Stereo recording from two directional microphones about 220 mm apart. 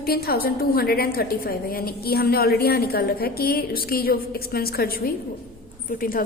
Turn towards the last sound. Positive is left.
turn(degrees=40)  # may be behind; listen again after turning